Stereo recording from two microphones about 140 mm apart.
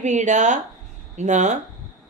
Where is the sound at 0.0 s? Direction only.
60° right (ahead or behind).